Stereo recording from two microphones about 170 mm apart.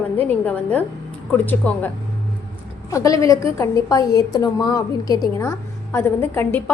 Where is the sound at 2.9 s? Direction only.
20° left (ahead or behind).